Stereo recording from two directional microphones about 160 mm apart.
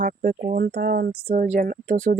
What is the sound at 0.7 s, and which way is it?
Speech, 80° right.